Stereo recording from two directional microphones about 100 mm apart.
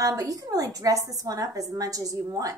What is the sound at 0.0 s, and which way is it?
A woman's voice, 35° right (ahead or behind).